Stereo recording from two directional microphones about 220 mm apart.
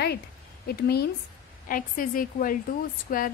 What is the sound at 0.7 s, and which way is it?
A woman's voice, 45° left (ahead or behind).